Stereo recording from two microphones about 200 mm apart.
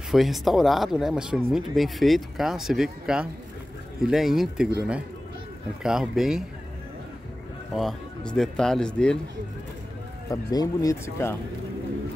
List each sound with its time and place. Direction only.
0.1 s speech: centre (ahead or behind)
5.8 s speech: 5° right (ahead or behind)
7.7 s speech: centre (ahead or behind)
10.3 s speech: 20° left (ahead or behind)